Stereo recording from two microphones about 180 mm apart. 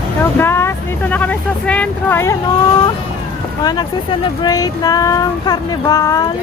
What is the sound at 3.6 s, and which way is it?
Speech, 25° left (ahead or behind).